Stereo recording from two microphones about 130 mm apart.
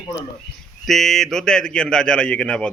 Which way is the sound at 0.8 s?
Centre (ahead or behind).